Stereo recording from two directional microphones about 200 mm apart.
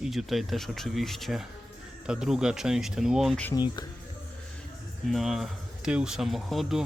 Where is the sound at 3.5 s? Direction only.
20° left (ahead or behind).